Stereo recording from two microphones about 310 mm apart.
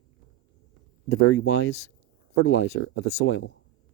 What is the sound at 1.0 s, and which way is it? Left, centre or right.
Speech, left.